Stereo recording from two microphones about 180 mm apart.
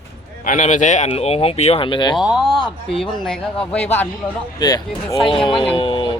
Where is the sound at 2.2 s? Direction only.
Centre (ahead or behind).